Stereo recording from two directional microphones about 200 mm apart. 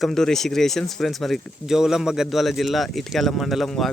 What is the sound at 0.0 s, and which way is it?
A man's voice, centre (ahead or behind).